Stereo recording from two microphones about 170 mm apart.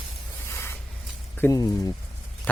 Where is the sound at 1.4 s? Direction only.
20° left (ahead or behind).